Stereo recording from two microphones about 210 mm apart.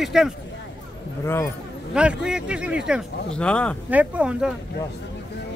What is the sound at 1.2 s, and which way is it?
Speech, 15° left (ahead or behind).